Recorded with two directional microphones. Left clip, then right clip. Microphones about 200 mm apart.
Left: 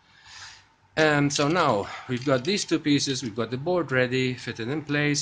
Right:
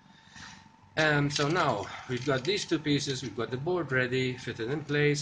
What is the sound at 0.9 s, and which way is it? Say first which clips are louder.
Speech: left 5 dB; 55° left (ahead or behind).